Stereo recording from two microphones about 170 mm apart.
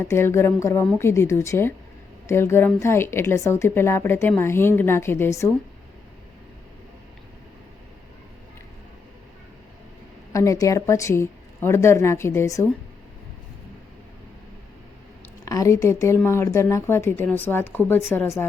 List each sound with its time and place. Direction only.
0.0 s speech: 15° left (ahead or behind)
10.3 s speech: 20° left (ahead or behind)
15.4 s speech: 20° left (ahead or behind)